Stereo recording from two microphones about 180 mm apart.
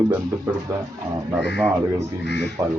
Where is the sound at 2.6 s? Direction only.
20° right (ahead or behind).